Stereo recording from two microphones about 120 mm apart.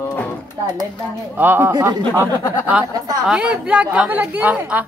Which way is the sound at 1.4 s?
15° right (ahead or behind).